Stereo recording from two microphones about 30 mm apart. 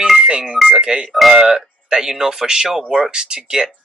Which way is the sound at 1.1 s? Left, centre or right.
Centre.